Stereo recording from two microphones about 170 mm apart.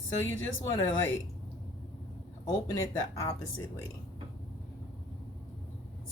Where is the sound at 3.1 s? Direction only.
20° left (ahead or behind).